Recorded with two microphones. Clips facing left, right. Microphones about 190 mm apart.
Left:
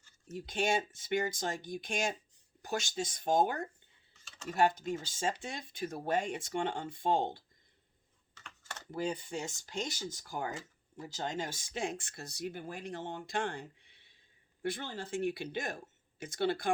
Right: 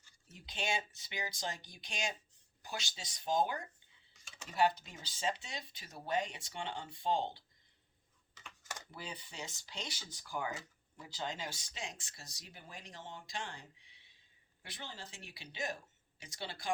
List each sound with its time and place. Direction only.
0.3 s speech: 45° left (ahead or behind)
8.4 s computer keyboard: 10° right (ahead or behind)
8.9 s speech: 45° left (ahead or behind)